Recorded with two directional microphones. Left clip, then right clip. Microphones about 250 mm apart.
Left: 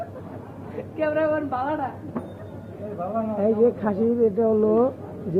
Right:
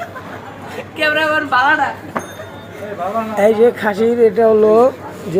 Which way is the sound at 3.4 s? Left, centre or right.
Centre.